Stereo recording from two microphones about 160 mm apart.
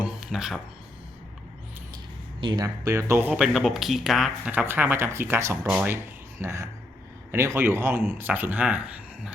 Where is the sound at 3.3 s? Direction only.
5° right (ahead or behind).